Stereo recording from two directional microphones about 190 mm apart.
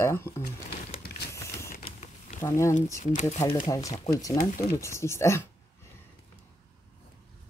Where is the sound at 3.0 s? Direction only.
40° left (ahead or behind).